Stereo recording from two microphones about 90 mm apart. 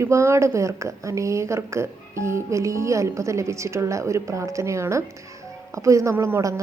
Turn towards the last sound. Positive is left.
turn(degrees=-35)  # may be behind; listen again after turning